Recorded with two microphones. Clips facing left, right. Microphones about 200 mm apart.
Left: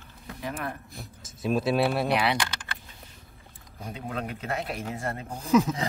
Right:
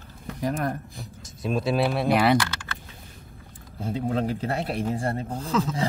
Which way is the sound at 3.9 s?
30° right (ahead or behind).